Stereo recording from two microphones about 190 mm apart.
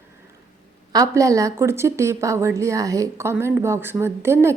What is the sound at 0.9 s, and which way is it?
A woman's voice, 15° right (ahead or behind).